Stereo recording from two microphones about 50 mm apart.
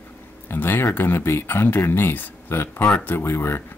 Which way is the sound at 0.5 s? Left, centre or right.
Left.